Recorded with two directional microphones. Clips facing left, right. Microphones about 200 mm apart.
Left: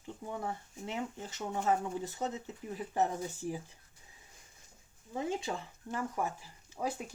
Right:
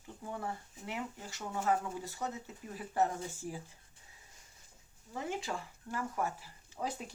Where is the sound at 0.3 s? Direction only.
20° left (ahead or behind).